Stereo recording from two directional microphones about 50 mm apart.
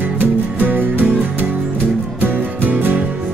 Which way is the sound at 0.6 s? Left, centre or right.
Right.